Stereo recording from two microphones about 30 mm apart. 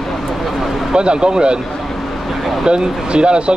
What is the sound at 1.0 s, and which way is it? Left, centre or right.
Speech, right.